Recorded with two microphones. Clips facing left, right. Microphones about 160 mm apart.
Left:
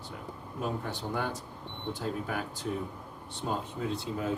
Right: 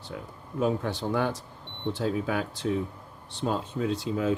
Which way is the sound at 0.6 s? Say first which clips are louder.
Right 7 dB; 90° right.